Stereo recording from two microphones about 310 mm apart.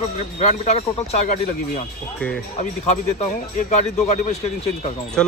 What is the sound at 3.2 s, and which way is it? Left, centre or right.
Speech, left.